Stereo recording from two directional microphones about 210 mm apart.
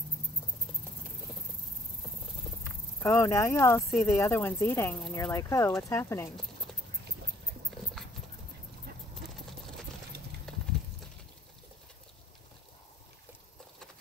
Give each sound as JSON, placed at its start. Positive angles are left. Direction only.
{"t": 3.0, "sound": "speech", "side_deg": 15}
{"t": 7.7, "sound": "clip-clop", "side_deg": 0}
{"t": 10.5, "sound": "clip-clop", "side_deg": 5}